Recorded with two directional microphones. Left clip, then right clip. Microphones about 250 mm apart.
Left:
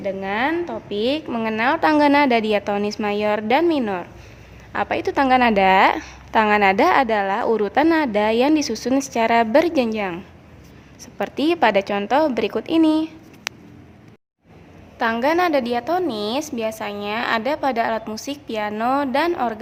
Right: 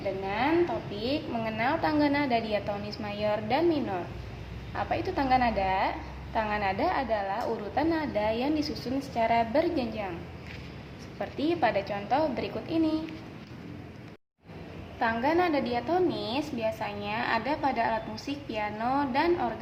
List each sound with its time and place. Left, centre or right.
0.3 s a woman's voice: left
11.2 s a woman's voice: left
14.9 s a woman's voice: left